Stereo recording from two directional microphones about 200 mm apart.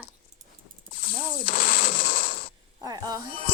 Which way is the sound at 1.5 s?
45° left (ahead or behind).